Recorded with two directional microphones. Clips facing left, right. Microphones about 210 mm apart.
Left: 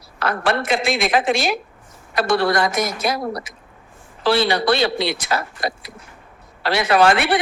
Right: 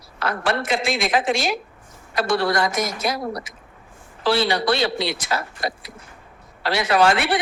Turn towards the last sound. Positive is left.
turn(degrees=60)  # may be behind; listen again after turning